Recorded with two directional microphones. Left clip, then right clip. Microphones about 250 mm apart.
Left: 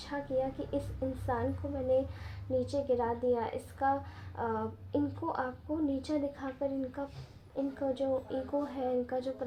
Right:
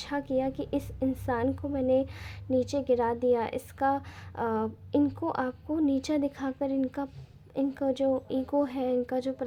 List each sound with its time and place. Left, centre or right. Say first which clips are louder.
0.0 s a woman's voice: right 4 dB; right